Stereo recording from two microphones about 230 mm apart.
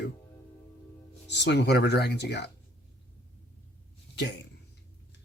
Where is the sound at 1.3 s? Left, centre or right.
Left.